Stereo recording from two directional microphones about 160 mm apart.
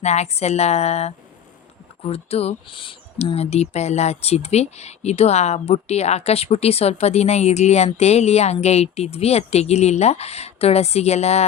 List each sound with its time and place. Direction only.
0.0 s a woman's voice: 45° left (ahead or behind)